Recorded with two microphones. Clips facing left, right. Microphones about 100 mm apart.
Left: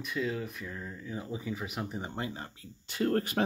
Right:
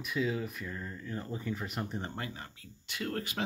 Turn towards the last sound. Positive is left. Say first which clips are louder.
# left 7 dB
turn(degrees=40)  # may be behind; listen again after turning